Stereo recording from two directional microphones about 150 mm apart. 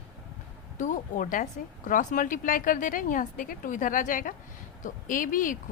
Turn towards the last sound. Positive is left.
turn(degrees=65)  # may be behind; listen again after turning